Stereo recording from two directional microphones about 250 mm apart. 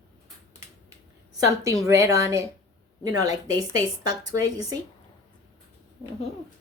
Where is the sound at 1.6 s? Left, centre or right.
Centre.